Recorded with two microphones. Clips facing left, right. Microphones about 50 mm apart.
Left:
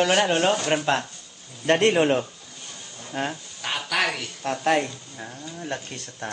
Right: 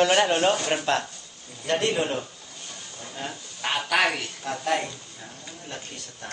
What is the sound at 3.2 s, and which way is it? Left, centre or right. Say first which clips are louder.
Speech: left 7 dB; left.